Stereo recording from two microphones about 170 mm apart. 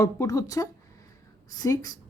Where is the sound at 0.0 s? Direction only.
20° left (ahead or behind).